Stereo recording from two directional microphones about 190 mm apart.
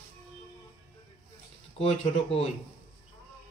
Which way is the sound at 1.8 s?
30° left (ahead or behind).